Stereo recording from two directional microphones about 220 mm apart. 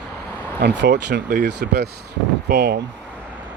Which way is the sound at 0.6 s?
50° right (ahead or behind).